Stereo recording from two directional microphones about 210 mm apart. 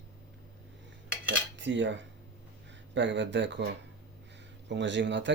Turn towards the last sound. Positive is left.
turn(degrees=-60)  # may be behind; listen again after turning